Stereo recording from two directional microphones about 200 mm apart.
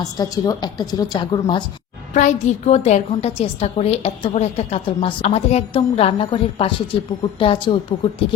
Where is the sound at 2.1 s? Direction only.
35° left (ahead or behind).